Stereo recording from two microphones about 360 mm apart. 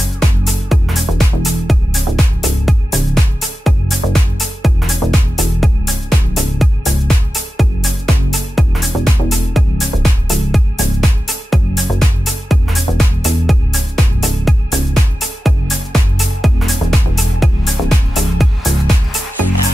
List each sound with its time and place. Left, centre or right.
0.4 s music: centre
19.3 s music: right